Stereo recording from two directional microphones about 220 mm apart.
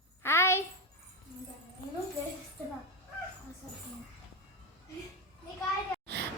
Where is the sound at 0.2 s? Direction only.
10° left (ahead or behind).